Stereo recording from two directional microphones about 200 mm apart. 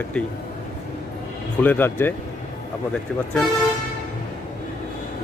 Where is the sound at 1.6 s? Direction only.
10° left (ahead or behind).